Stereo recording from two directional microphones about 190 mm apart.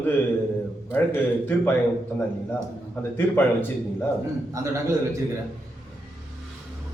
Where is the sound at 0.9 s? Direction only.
10° left (ahead or behind).